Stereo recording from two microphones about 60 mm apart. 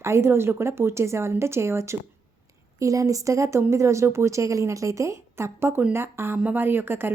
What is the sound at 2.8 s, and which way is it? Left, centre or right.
Speech, right.